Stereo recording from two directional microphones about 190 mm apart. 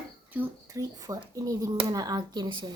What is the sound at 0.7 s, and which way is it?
Speech, 20° right (ahead or behind).